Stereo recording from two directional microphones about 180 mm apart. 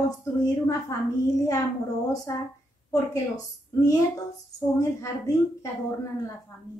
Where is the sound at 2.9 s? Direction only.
20° left (ahead or behind).